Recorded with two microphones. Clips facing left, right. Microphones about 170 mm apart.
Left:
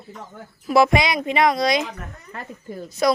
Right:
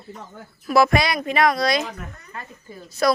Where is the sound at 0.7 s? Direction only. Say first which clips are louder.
Left 1 dB; 20° left (ahead or behind).